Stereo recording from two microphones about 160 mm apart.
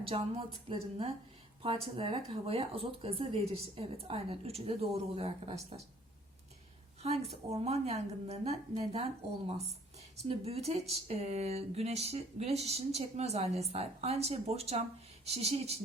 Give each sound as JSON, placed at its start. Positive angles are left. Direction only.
{"t": 0.0, "sound": "speech", "side_deg": -35}
{"t": 7.0, "sound": "speech", "side_deg": -40}
{"t": 10.2, "sound": "speech", "side_deg": -40}